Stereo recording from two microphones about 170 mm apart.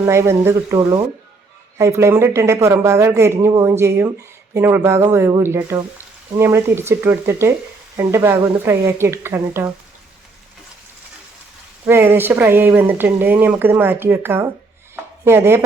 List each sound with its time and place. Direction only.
0.0 s speech: 15° right (ahead or behind)
11.9 s speech: 15° right (ahead or behind)